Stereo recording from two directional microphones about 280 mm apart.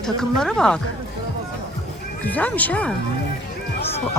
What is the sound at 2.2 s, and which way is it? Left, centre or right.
Speech, centre.